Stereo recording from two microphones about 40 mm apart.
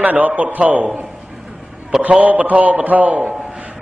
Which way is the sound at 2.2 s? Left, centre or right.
Right.